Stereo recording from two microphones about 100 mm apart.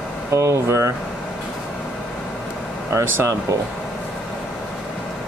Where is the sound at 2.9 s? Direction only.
25° right (ahead or behind).